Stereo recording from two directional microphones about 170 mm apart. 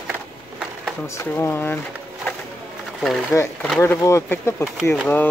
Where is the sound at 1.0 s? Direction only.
15° left (ahead or behind).